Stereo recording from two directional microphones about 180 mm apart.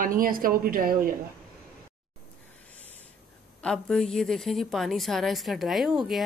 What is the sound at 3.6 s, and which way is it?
A woman's voice, 5° left (ahead or behind).